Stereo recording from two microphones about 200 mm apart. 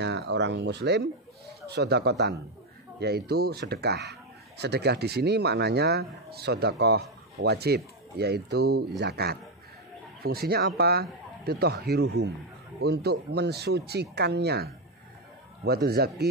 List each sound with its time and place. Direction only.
0.0 s speech: 60° right (ahead or behind)